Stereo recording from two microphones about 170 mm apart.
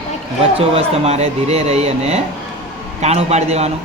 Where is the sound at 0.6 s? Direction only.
35° right (ahead or behind).